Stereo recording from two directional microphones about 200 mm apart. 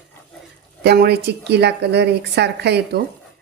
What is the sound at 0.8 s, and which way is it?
Speech, 55° right (ahead or behind).